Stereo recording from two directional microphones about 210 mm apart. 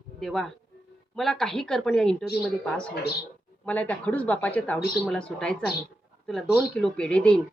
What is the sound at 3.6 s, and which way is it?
A woman's voice, 5° left (ahead or behind).